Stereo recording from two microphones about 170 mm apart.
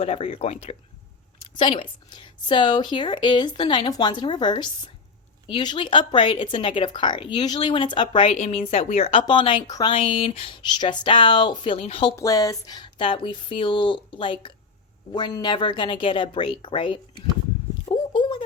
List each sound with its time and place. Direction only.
0.0 s a woman's voice: 35° left (ahead or behind)
12.1 s speech: 20° left (ahead or behind)
17.8 s a sound: 25° left (ahead or behind)